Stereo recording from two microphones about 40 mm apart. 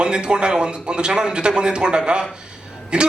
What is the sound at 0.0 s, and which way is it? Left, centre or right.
A man's voice, right.